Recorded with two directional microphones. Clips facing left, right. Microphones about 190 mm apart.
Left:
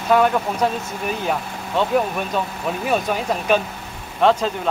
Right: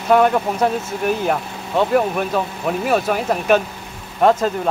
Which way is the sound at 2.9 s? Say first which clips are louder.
Right 2 dB; 5° right (ahead or behind).